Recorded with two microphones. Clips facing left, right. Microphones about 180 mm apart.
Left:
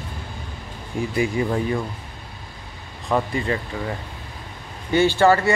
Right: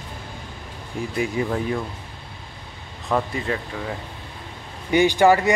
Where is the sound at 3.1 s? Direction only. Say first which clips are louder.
Left 1 dB; centre (ahead or behind).